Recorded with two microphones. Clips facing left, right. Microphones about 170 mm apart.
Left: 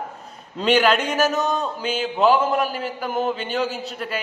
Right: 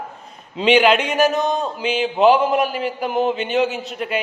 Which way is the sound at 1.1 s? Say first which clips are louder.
Right 3 dB; 15° right (ahead or behind).